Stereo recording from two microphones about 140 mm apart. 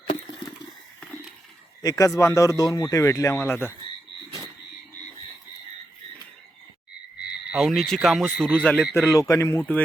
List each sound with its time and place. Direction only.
1.8 s a man's voice: 25° left (ahead or behind)
7.5 s speech: centre (ahead or behind)
9.0 s a man's voice: 20° left (ahead or behind)